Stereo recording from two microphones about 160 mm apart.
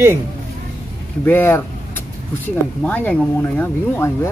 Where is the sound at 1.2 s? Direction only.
15° left (ahead or behind).